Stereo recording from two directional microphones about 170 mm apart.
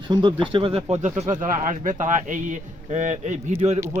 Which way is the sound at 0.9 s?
45° right (ahead or behind).